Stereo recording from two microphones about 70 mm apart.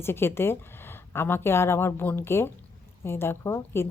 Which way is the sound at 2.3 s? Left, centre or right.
Left.